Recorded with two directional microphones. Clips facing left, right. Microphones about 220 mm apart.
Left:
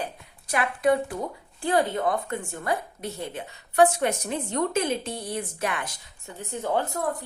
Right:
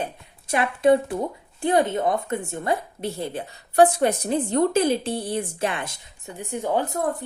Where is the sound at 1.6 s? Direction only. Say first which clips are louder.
Right 3 dB; 20° right (ahead or behind).